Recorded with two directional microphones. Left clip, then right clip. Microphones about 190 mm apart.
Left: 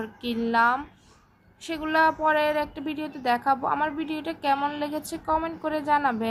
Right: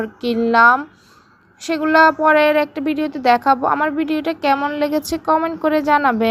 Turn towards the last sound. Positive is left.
turn(degrees=-35)  # may be behind; listen again after turning